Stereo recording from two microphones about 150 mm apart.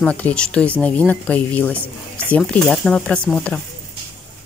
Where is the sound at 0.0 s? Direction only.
10° left (ahead or behind).